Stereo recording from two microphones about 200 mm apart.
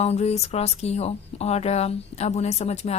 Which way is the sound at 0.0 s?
30° left (ahead or behind).